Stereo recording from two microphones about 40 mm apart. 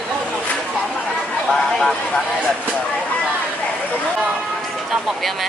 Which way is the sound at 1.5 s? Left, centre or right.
Centre.